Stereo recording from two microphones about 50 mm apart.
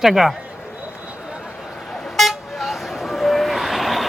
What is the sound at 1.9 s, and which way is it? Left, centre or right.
Vehicle, centre.